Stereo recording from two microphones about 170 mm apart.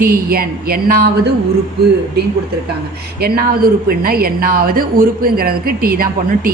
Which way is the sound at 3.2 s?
65° right (ahead or behind).